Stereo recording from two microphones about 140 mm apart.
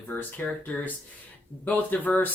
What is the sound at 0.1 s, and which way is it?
Speech, 15° left (ahead or behind).